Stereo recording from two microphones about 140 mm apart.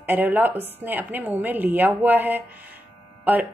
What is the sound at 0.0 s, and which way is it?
A woman's voice, 15° right (ahead or behind).